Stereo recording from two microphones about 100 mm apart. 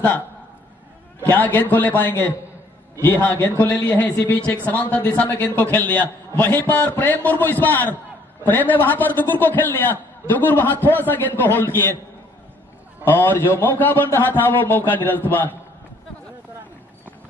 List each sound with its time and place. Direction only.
1.3 s a man's voice: 15° left (ahead or behind)
13.0 s a man's voice: 20° left (ahead or behind)